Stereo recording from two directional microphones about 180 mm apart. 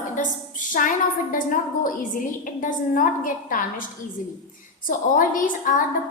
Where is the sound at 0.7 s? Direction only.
50° left (ahead or behind).